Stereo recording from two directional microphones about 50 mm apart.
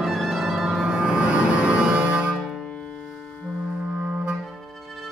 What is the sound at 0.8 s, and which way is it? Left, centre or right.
Music, centre.